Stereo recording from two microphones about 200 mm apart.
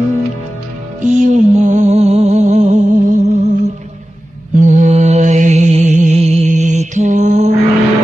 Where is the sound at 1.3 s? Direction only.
35° right (ahead or behind).